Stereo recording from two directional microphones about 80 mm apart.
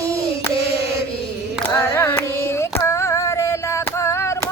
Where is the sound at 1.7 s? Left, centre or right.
Left.